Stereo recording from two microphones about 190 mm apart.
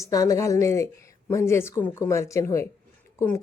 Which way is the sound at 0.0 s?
20° left (ahead or behind).